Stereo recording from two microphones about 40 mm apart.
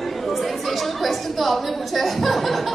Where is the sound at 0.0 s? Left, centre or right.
Centre.